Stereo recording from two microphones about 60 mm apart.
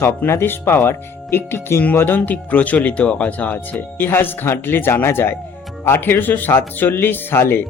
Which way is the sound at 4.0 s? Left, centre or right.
Left.